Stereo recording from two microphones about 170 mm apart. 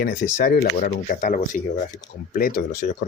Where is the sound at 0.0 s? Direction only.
55° left (ahead or behind).